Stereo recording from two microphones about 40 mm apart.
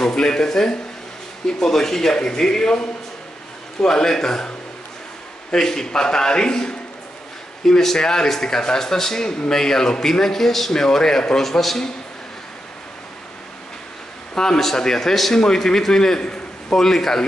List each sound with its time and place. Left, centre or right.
0.2 s a man's voice: centre
7.8 s a man's voice: centre
14.3 s a man's voice: centre
16.7 s a man's voice: centre